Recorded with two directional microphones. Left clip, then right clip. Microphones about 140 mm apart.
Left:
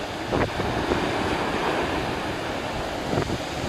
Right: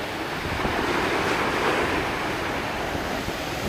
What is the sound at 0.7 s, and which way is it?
Waves, 85° left.